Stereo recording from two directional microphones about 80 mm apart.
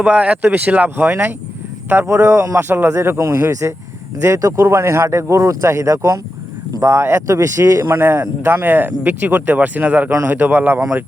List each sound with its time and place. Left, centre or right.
0.0 s speech: centre
2.0 s speech: right